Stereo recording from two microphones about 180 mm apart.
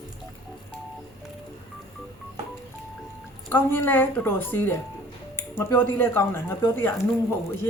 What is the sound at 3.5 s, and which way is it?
Speech, 10° left (ahead or behind).